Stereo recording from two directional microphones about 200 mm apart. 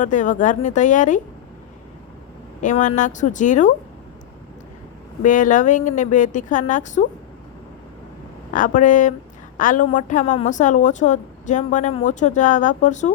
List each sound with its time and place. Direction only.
0.0 s a woman's voice: 40° left (ahead or behind)
2.6 s a woman's voice: 40° left (ahead or behind)
5.2 s a woman's voice: 40° left (ahead or behind)
8.5 s a woman's voice: 40° left (ahead or behind)